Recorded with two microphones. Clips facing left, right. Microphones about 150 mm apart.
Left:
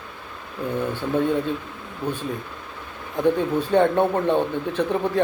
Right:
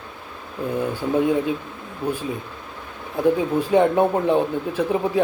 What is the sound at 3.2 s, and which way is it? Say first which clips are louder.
Speech: right 1 dB; 10° right (ahead or behind).